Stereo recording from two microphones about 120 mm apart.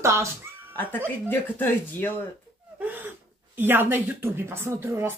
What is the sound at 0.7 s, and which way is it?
Speech, 15° left (ahead or behind).